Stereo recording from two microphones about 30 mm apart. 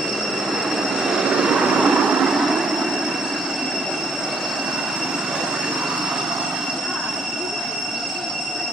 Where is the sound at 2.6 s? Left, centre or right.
Centre.